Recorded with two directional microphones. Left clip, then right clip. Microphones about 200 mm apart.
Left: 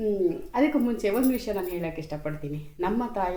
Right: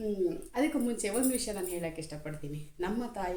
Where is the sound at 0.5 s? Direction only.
10° right (ahead or behind).